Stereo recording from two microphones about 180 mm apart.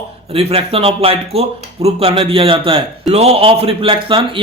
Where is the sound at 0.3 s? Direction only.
35° right (ahead or behind).